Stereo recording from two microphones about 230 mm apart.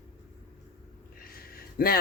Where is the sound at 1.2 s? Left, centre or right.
Left.